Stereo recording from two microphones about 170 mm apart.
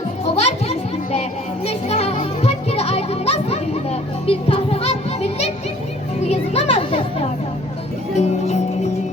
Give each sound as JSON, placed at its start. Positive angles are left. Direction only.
{"t": 0.3, "sound": "music", "side_deg": 40}
{"t": 8.1, "sound": "music", "side_deg": 40}